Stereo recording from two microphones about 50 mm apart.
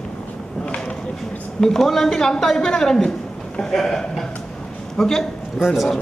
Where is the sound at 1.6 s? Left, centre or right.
Centre.